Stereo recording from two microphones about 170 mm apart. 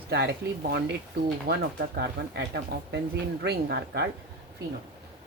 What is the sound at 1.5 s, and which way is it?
Speech, 75° right (ahead or behind).